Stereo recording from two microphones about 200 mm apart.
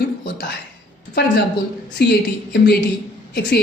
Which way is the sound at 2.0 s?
55° left (ahead or behind).